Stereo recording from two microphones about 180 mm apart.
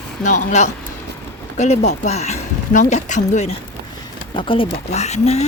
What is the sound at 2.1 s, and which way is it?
Speech, 40° left (ahead or behind).